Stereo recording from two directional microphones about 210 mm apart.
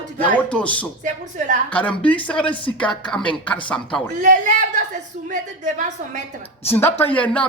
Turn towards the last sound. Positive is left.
turn(degrees=5)  # may be behind; listen again after turning